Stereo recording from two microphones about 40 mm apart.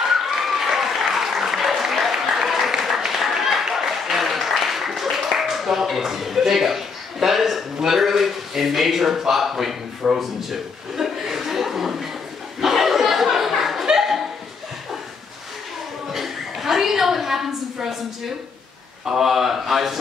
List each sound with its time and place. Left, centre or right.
0.1 s applause: centre
10.0 s speech: centre
10.5 s chuckle: centre
12.5 s a sound: centre
16.1 s a sound: centre
19.0 s speech: centre